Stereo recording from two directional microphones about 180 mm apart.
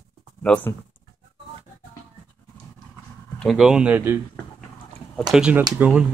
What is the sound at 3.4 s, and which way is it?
Speech, centre (ahead or behind).